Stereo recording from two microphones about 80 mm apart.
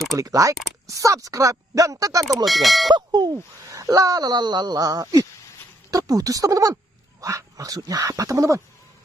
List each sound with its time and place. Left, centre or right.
0.1 s speech: right
2.4 s speech: centre
3.1 s speech: right
3.7 s speech: right